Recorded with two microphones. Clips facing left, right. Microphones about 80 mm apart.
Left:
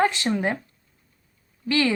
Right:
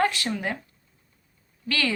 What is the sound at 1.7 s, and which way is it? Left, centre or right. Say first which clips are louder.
Speech: left 5 dB; left.